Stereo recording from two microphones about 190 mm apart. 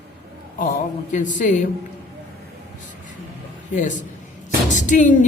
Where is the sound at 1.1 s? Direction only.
40° left (ahead or behind).